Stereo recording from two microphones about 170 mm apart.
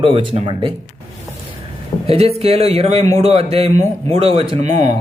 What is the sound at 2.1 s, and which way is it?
A man's voice, 35° right (ahead or behind).